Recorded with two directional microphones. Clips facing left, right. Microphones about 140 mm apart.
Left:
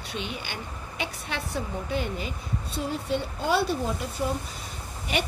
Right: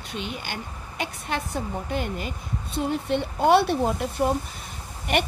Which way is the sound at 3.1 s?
60° right (ahead or behind).